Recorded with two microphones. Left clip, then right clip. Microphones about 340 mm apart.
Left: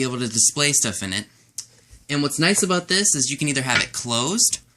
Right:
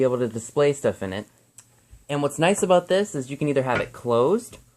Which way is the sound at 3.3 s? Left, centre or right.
Centre.